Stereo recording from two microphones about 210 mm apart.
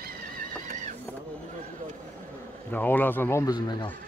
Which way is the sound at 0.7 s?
35° right (ahead or behind).